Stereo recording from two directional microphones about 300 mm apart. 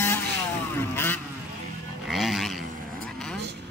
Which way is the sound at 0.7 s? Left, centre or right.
Centre.